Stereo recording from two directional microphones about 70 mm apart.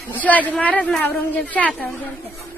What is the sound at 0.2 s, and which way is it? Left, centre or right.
A woman's voice, left.